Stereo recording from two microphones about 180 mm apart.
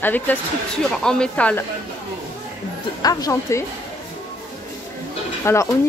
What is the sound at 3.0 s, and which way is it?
Speech, 20° left (ahead or behind).